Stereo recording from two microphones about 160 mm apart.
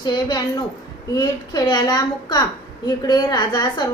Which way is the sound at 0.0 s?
25° left (ahead or behind).